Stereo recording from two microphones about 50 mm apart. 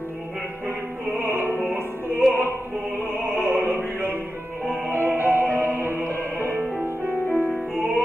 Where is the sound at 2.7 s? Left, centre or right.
Right.